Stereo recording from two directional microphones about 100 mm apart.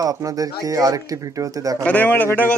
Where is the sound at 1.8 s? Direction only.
15° left (ahead or behind).